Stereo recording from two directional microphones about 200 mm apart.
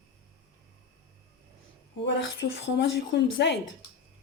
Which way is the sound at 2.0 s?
65° left (ahead or behind).